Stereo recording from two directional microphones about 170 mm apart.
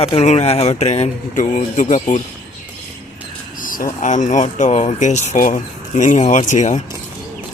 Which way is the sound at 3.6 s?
55° left (ahead or behind).